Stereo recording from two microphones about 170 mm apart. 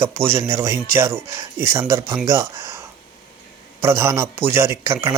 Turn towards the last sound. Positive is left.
turn(degrees=-15)  # may be behind; listen again after turning